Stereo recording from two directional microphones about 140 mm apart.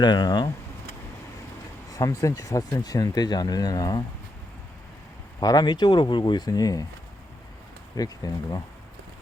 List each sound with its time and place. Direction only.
0.0 s speech: 30° left (ahead or behind)
1.9 s speech: 25° left (ahead or behind)
5.4 s speech: 30° left (ahead or behind)
7.9 s speech: 25° left (ahead or behind)